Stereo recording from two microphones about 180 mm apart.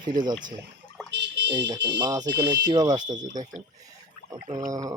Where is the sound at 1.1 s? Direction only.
75° right (ahead or behind).